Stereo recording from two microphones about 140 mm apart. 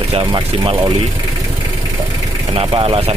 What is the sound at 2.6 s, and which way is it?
Speech, 40° right (ahead or behind).